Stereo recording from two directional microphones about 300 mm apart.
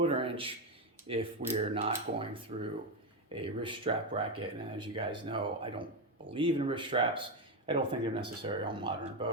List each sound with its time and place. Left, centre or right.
0.0 s speech: centre